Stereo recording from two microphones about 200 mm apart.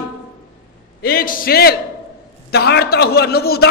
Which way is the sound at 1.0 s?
45° left (ahead or behind).